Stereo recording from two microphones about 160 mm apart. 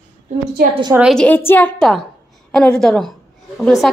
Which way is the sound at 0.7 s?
30° right (ahead or behind).